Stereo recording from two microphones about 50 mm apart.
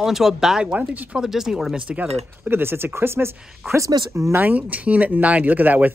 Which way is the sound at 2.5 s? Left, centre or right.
Right.